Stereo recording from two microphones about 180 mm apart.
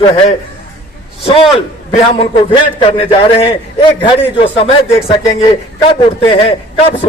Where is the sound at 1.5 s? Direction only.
30° left (ahead or behind).